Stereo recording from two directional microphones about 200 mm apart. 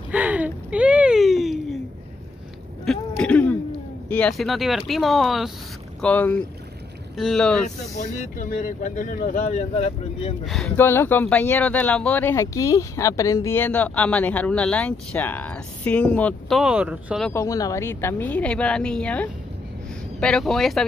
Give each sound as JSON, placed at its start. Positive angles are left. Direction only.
{"t": 0.1, "sound": "a sound", "side_deg": -5}
{"t": 2.8, "sound": "a sound", "side_deg": 5}
{"t": 4.1, "sound": "speech", "side_deg": 5}
{"t": 8.0, "sound": "speech", "side_deg": 40}
{"t": 10.4, "sound": "speech", "side_deg": 0}
{"t": 17.3, "sound": "speech", "side_deg": 15}